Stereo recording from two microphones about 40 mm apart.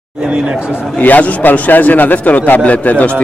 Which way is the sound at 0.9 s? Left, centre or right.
Left.